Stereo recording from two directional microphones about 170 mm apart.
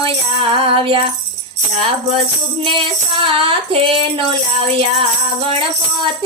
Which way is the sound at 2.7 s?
30° right (ahead or behind).